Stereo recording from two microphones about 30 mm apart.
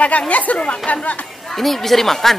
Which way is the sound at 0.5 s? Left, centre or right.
Left.